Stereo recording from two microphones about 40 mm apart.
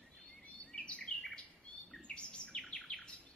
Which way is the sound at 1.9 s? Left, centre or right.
Left.